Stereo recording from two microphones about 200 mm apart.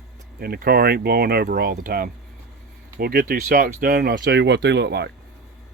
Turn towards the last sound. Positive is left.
turn(degrees=-55)  # may be behind; listen again after turning